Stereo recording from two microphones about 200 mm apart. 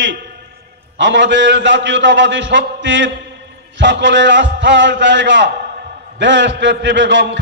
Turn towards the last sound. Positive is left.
turn(degrees=-65)  # may be behind; listen again after turning